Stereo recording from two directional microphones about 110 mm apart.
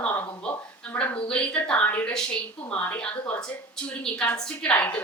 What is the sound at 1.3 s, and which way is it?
A woman's voice, 10° left (ahead or behind).